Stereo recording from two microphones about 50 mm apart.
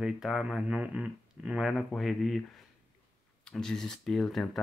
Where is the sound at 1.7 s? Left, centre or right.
Centre.